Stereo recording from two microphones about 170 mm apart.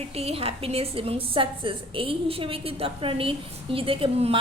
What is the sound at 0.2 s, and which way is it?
A woman's voice, 35° right (ahead or behind).